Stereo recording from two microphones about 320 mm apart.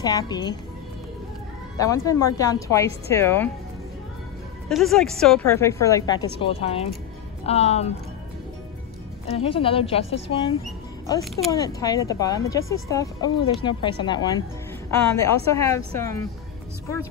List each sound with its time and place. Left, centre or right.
0.0 s a woman's voice: centre
1.8 s a woman's voice: centre
4.6 s a woman's voice: centre
9.3 s a woman's voice: centre